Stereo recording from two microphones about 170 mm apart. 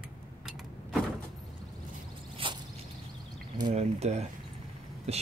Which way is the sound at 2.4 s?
30° right (ahead or behind).